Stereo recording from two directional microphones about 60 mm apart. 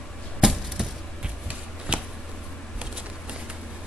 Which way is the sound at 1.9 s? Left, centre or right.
Right.